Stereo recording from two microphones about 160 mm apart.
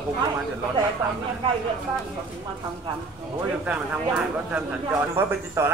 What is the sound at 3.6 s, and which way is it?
Speech, 10° right (ahead or behind).